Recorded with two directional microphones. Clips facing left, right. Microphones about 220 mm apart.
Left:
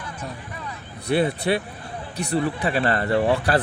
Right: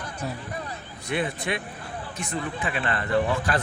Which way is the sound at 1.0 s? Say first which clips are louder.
Left 7 dB; 35° left (ahead or behind).